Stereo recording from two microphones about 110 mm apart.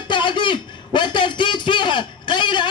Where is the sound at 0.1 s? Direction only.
45° left (ahead or behind).